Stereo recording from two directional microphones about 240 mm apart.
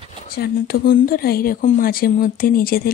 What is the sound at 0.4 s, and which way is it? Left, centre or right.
Speech, left.